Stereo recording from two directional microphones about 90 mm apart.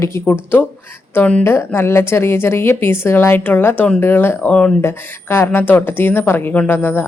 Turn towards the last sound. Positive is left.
turn(degrees=25)  # may be behind; listen again after turning